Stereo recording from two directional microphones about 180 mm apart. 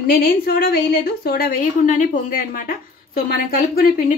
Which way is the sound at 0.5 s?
55° left (ahead or behind).